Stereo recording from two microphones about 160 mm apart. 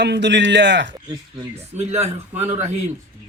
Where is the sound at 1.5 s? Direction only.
40° right (ahead or behind).